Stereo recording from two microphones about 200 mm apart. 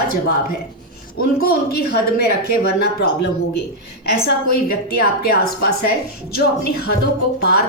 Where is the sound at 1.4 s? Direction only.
50° left (ahead or behind).